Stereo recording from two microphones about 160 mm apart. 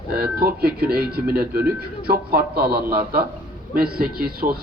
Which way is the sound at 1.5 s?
15° right (ahead or behind).